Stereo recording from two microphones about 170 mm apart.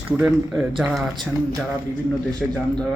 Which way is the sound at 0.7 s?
Centre (ahead or behind).